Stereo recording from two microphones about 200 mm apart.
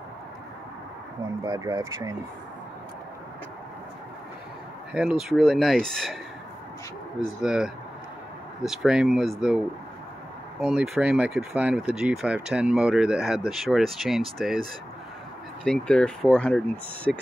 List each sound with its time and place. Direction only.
1.4 s speech: 20° right (ahead or behind)
4.9 s speech: 5° right (ahead or behind)
7.4 s speech: 5° right (ahead or behind)
10.6 s speech: 5° right (ahead or behind)
15.6 s speech: 5° left (ahead or behind)